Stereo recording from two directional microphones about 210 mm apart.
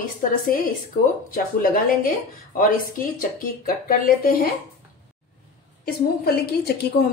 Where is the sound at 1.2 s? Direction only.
45° left (ahead or behind).